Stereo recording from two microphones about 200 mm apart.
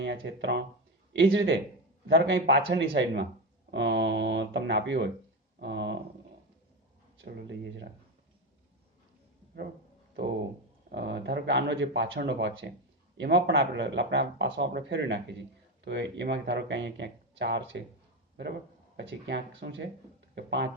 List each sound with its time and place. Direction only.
0.0 s speech: 60° right (ahead or behind)
5.5 s a sound: 60° right (ahead or behind)
7.3 s speech: 55° right (ahead or behind)
10.9 s speech: 60° right (ahead or behind)
18.9 s speech: 60° right (ahead or behind)